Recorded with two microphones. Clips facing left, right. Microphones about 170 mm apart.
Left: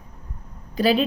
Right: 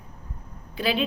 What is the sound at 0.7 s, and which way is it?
Speech, 40° left (ahead or behind).